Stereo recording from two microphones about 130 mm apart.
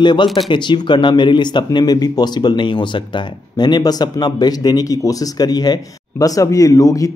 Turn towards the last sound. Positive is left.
turn(degrees=25)  # may be behind; listen again after turning